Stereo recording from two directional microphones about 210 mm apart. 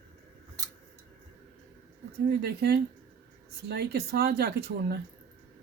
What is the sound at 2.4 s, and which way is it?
Speech, 50° right (ahead or behind).